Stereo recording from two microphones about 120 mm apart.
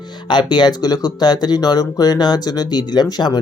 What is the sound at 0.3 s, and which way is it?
Speech, 40° left (ahead or behind).